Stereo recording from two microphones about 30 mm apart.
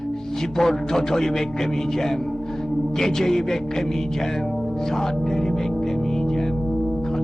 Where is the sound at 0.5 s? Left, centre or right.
Centre.